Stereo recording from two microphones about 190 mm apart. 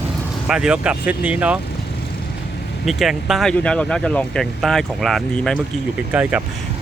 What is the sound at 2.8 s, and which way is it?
Speech, centre (ahead or behind).